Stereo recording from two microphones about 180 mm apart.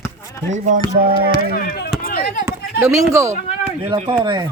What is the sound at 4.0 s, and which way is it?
Speech, 30° right (ahead or behind).